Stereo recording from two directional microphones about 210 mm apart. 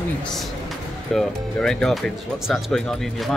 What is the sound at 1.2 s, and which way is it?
Speech, centre (ahead or behind).